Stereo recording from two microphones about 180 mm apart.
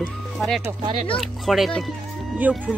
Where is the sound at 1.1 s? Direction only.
Centre (ahead or behind).